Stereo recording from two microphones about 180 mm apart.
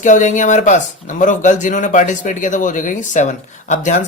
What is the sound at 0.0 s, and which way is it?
Speech, 45° left (ahead or behind).